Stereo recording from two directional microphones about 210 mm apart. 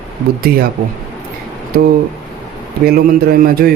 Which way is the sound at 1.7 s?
45° right (ahead or behind).